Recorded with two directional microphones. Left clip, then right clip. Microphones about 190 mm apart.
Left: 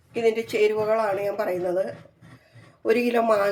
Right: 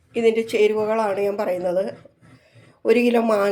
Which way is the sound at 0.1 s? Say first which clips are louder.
Right 4 dB; 35° right (ahead or behind).